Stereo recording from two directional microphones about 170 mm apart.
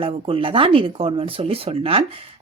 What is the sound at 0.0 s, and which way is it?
Speech, 30° right (ahead or behind).